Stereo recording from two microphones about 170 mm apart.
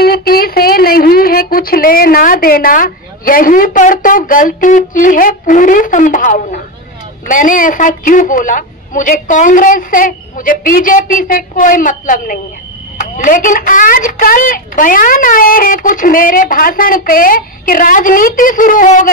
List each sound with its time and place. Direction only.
0.0 s a woman's voice: 65° left (ahead or behind)